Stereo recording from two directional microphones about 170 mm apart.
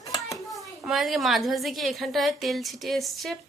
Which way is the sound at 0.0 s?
20° left (ahead or behind).